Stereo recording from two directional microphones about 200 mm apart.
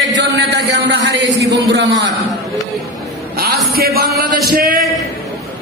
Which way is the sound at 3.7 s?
50° right (ahead or behind).